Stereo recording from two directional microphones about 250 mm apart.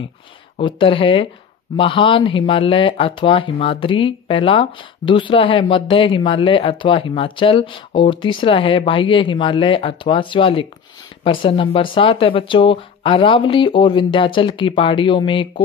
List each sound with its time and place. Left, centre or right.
0.6 s speech: left